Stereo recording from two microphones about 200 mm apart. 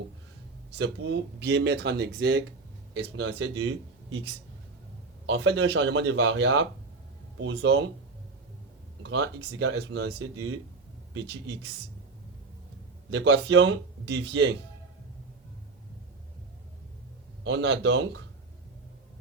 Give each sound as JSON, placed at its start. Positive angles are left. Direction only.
{"t": 0.8, "sound": "speech", "side_deg": -65}
{"t": 9.0, "sound": "speech", "side_deg": -65}
{"t": 13.1, "sound": "speech", "side_deg": -65}
{"t": 17.4, "sound": "speech", "side_deg": -65}